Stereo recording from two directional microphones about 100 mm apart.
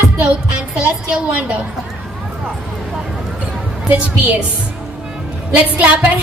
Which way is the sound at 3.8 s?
15° right (ahead or behind).